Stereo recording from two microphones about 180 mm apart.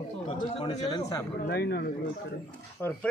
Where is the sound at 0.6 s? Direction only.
25° left (ahead or behind).